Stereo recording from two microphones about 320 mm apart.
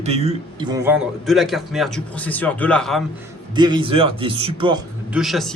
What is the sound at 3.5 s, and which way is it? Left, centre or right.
Speech, centre.